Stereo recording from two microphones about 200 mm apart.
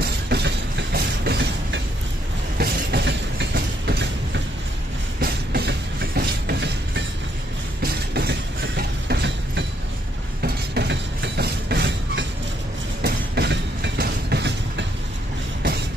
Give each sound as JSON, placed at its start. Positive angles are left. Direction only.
{"t": 0.0, "sound": "train", "side_deg": -55}
{"t": 10.4, "sound": "a sound", "side_deg": -55}
{"t": 13.0, "sound": "train", "side_deg": -55}